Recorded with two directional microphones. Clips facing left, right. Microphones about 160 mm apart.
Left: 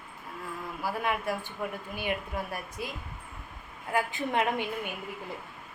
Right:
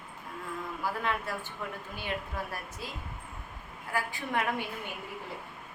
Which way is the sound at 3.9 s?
20° left (ahead or behind).